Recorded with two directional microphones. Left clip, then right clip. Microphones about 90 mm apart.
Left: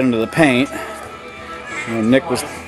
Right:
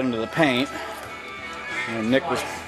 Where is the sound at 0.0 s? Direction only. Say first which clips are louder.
Left 7 dB; 35° left (ahead or behind).